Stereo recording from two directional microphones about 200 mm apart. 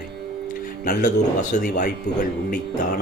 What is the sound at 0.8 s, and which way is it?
Speech, 40° left (ahead or behind).